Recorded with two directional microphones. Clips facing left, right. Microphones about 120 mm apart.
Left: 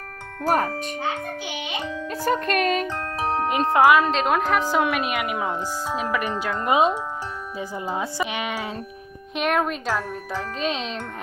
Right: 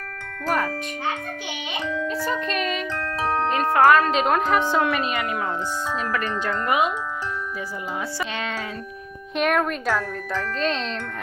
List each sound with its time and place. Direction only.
0.4 s music: 45° left (ahead or behind)
2.0 s music: 50° left (ahead or behind)
3.8 s speech: 10° left (ahead or behind)
4.1 s a woman's voice: centre (ahead or behind)
6.7 s speech: 25° left (ahead or behind)
8.2 s speech: 15° left (ahead or behind)
9.3 s speech: centre (ahead or behind)